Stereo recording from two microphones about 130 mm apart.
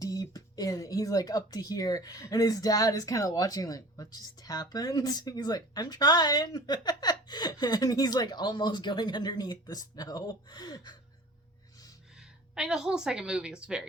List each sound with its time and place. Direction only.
0.0 s speech: 30° left (ahead or behind)
12.5 s a woman's voice: 5° right (ahead or behind)